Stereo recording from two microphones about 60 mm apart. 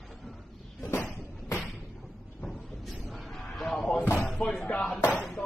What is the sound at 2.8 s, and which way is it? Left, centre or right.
Vehicle, centre.